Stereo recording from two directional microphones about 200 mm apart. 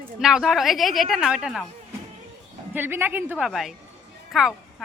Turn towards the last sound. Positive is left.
turn(degrees=0)  # may be behind; listen again after turning